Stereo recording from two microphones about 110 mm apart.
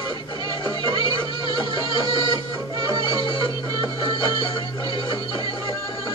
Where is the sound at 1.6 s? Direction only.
50° left (ahead or behind).